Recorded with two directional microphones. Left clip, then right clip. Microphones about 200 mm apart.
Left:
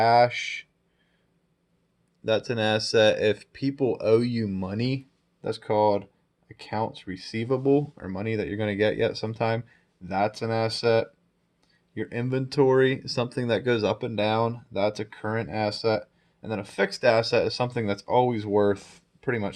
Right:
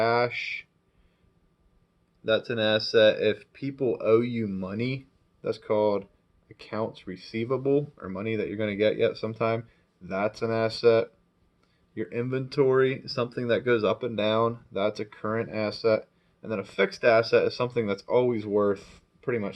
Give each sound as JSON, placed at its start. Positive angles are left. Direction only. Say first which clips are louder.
{"t": 0.0, "sound": "speech", "louder": "left 5 dB", "side_deg": 50}
{"t": 2.2, "sound": "speech", "louder": "even", "side_deg": 50}
{"t": 11.9, "sound": "speech", "louder": "left 1 dB", "side_deg": 50}